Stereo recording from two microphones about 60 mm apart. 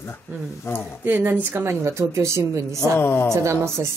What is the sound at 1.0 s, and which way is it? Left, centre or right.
Speech, right.